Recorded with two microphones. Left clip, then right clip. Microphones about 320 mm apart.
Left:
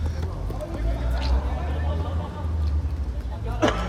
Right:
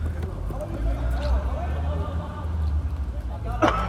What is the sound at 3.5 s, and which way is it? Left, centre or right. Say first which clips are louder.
Vehicle: right 2 dB; centre.